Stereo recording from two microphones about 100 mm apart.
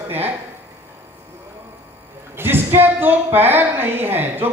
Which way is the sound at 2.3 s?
20° right (ahead or behind).